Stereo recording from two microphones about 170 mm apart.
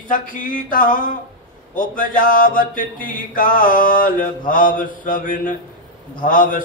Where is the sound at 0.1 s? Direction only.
50° left (ahead or behind).